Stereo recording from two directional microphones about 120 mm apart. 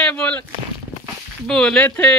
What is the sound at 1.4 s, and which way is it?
Speech, 5° left (ahead or behind).